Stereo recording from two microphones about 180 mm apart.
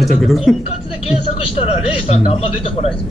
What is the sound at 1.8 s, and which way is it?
Speech, 35° left (ahead or behind).